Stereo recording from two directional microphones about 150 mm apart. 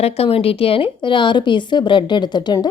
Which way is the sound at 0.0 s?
40° left (ahead or behind).